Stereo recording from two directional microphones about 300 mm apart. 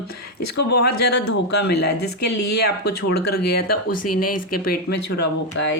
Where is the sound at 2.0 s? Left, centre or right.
Left.